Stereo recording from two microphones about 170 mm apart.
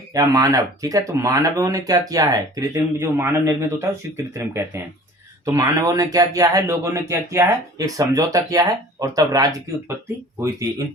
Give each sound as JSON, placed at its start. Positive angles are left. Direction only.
{"t": 0.1, "sound": "speech", "side_deg": -20}